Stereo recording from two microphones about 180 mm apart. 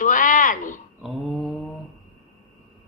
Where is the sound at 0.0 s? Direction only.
45° left (ahead or behind).